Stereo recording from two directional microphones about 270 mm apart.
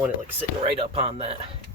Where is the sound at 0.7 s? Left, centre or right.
Right.